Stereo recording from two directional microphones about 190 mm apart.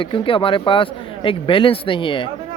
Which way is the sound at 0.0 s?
25° left (ahead or behind).